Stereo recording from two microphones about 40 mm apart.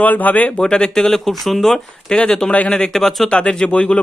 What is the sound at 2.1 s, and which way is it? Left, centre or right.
Speech, centre.